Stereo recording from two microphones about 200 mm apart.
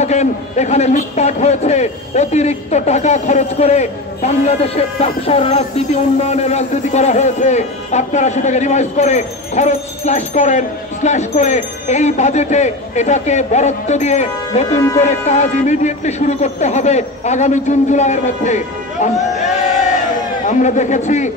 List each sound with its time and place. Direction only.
0.0 s speech: 35° left (ahead or behind)